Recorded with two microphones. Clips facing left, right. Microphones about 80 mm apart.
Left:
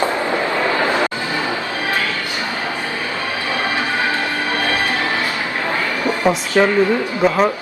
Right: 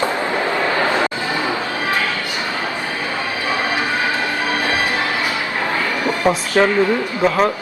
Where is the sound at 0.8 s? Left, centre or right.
Right.